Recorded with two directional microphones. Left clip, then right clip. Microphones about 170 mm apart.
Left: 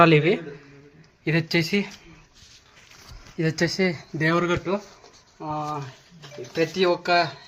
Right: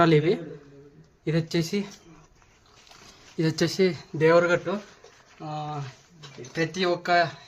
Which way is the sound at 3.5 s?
35° right (ahead or behind).